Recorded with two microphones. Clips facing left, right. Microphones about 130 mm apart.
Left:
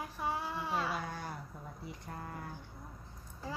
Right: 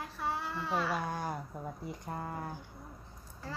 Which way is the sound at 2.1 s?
40° right (ahead or behind).